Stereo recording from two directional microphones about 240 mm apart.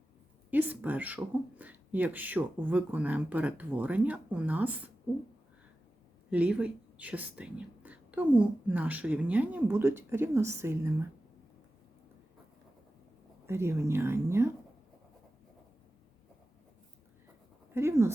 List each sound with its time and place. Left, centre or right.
0.5 s speech: centre
6.3 s speech: centre
13.5 s speech: centre
17.7 s speech: centre